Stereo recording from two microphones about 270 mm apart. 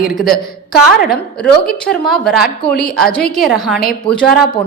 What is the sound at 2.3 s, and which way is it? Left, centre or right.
Speech, left.